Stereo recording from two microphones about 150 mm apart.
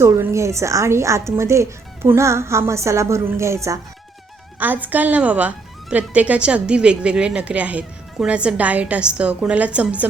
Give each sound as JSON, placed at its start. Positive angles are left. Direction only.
{"t": 0.0, "sound": "a woman's voice", "side_deg": -15}